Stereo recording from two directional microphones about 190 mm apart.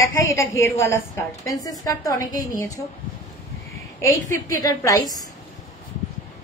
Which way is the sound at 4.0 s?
15° left (ahead or behind).